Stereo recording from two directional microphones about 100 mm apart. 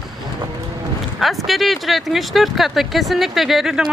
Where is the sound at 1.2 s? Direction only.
Centre (ahead or behind).